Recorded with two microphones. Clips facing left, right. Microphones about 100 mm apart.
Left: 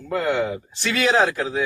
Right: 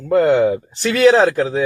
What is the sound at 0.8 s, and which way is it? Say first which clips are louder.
Speech: right 8 dB; 40° right (ahead or behind).